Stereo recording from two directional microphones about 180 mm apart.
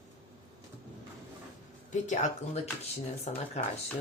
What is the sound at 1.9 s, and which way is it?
Speech, 40° left (ahead or behind).